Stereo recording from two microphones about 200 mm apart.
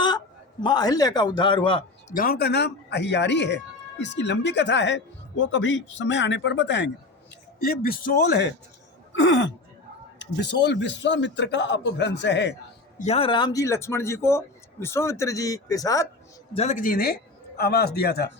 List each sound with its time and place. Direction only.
0.6 s a man's voice: 20° left (ahead or behind)
2.0 s speech: 45° left (ahead or behind); by 6.9 s 60° left (ahead or behind)
7.6 s a man's voice: 50° left (ahead or behind)
9.1 s speech: 65° left (ahead or behind)
13.0 s speech: 30° left (ahead or behind)
16.6 s a man's voice: 40° left (ahead or behind)